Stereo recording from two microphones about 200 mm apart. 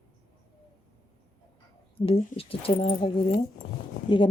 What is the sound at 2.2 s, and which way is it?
Speech, 40° left (ahead or behind).